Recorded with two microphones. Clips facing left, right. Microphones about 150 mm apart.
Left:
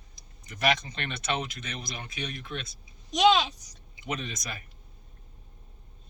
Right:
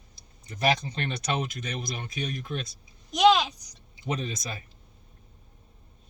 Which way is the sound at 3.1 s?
Centre (ahead or behind).